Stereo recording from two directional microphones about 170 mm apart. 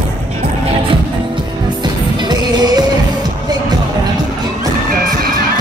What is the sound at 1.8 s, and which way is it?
Music, 25° right (ahead or behind).